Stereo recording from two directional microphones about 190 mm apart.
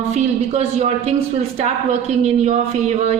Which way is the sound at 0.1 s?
35° right (ahead or behind).